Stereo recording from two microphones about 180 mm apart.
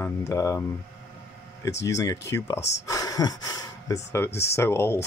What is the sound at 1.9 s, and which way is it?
Speech, 20° left (ahead or behind).